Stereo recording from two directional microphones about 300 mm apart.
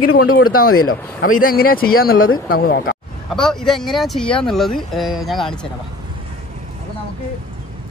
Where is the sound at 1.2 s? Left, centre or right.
Left.